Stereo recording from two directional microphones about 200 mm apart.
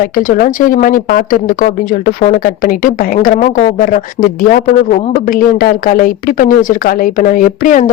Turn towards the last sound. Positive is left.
turn(degrees=40)  # may be behind; listen again after turning